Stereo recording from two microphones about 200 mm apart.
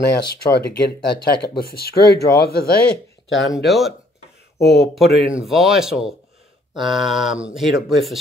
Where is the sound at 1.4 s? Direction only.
50° left (ahead or behind).